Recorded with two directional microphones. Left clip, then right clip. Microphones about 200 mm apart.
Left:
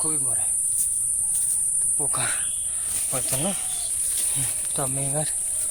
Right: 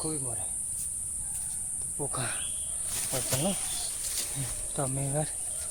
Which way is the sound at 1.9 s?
10° left (ahead or behind).